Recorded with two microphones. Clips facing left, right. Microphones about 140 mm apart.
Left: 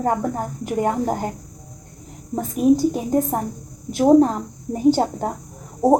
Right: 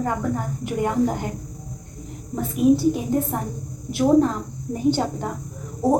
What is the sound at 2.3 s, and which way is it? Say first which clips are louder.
Speech: left 1 dB; 40° left (ahead or behind).